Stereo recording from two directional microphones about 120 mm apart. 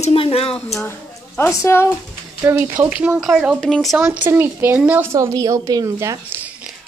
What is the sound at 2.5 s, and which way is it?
Speech, 20° right (ahead or behind).